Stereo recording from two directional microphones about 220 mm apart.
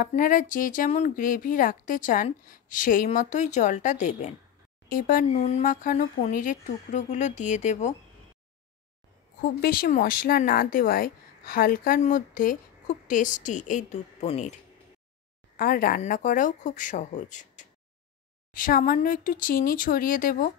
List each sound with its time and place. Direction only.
0.0 s speech: 40° left (ahead or behind)
9.4 s speech: 40° left (ahead or behind)
15.5 s speech: 40° left (ahead or behind)